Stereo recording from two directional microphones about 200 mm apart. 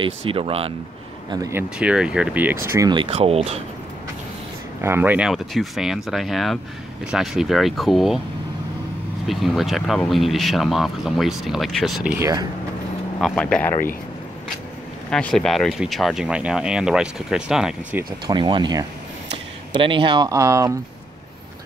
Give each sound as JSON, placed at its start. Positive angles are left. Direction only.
{"t": 0.0, "sound": "speech", "side_deg": -25}
{"t": 1.3, "sound": "speech", "side_deg": -15}
{"t": 4.8, "sound": "speech", "side_deg": -10}
{"t": 9.3, "sound": "speech", "side_deg": 0}
{"t": 15.0, "sound": "speech", "side_deg": 5}
{"t": 18.2, "sound": "speech", "side_deg": -20}